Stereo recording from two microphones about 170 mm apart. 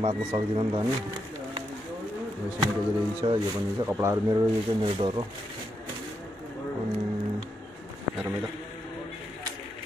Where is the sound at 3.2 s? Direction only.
25° right (ahead or behind).